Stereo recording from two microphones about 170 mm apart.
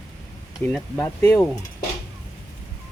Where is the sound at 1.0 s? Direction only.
15° left (ahead or behind).